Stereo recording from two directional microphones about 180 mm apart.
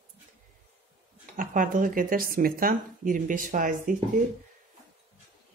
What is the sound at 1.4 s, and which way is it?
Speech, 50° right (ahead or behind).